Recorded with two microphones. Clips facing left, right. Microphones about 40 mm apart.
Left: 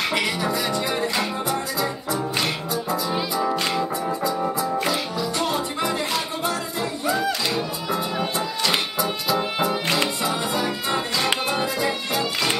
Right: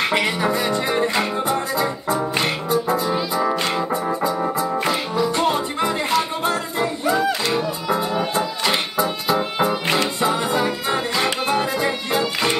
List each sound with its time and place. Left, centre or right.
0.0 s music: right
4.6 s music: centre
6.1 s music: right
7.1 s music: centre
8.4 s music: right